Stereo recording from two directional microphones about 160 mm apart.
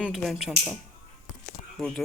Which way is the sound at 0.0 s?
Centre (ahead or behind).